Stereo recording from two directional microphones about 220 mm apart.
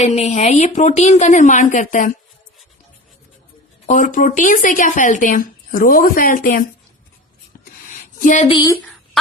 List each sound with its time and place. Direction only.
0.1 s speech: 30° left (ahead or behind)
3.8 s speech: 35° left (ahead or behind)
7.9 s a sound: 35° left (ahead or behind)
8.4 s a woman's voice: 20° left (ahead or behind)